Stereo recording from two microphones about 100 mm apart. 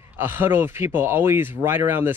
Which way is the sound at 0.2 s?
20° right (ahead or behind).